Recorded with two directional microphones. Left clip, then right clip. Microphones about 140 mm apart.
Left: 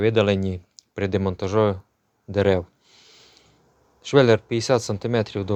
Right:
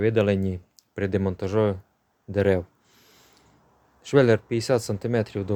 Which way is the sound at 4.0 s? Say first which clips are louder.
Left 3 dB; 25° right (ahead or behind).